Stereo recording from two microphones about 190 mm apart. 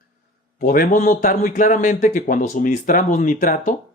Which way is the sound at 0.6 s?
45° left (ahead or behind).